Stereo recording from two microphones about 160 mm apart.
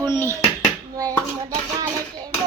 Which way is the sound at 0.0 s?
15° left (ahead or behind).